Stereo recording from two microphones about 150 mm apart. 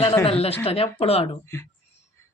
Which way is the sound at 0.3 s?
40° left (ahead or behind).